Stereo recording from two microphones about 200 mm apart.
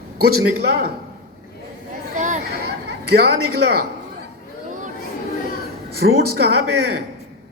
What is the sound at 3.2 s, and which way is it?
Speech, 55° right (ahead or behind).